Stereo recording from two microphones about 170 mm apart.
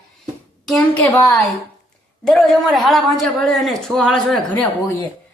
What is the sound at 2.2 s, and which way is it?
A man's voice, centre (ahead or behind).